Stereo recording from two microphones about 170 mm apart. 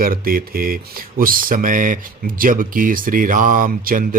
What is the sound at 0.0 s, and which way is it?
Speech, 60° right (ahead or behind).